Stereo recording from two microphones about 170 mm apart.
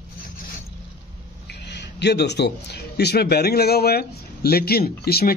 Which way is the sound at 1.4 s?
80° left.